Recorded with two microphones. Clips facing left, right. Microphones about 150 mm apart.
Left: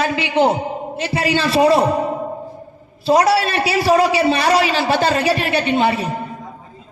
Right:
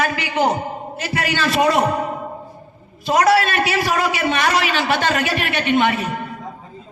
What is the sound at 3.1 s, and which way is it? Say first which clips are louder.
A woman's voice: left 1 dB; 30° left (ahead or behind).